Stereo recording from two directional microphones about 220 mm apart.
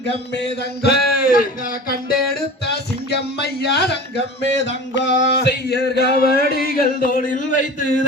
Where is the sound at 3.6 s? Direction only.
50° left (ahead or behind).